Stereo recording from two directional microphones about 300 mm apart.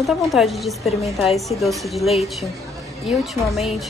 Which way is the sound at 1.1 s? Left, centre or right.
Centre.